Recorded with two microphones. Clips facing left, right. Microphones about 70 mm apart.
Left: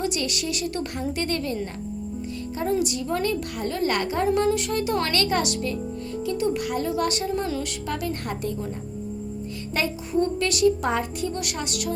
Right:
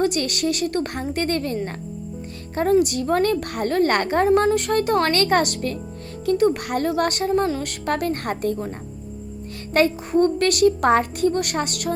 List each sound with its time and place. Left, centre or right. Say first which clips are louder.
0.0 s a woman's voice: right 6 dB; right
2.6 s a woman's voice: right 7 dB; right
4.3 s a woman's voice: right 4 dB; right
9.7 s a woman's voice: right 7 dB; right